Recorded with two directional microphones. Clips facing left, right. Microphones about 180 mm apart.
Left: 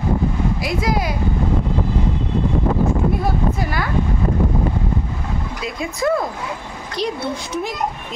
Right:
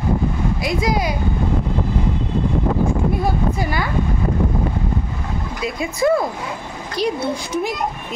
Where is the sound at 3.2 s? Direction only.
Centre (ahead or behind).